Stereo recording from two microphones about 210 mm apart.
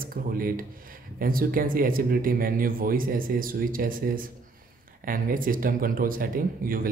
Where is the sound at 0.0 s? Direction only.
45° right (ahead or behind).